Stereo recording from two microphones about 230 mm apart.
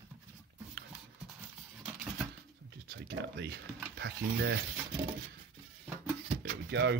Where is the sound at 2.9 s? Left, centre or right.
Right.